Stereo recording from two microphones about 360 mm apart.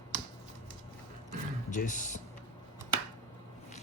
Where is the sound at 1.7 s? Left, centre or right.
Left.